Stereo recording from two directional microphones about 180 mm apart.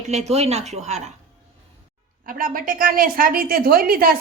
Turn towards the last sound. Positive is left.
turn(degrees=-55)  # may be behind; listen again after turning